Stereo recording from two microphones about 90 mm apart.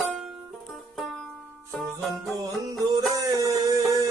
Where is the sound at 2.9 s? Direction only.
45° right (ahead or behind).